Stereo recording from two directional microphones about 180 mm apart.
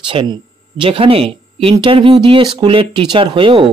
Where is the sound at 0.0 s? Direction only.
25° right (ahead or behind).